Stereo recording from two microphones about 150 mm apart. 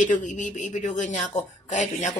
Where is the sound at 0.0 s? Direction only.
60° left (ahead or behind).